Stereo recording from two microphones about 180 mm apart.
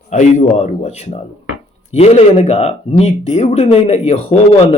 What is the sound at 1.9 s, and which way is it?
Speech, 35° left (ahead or behind).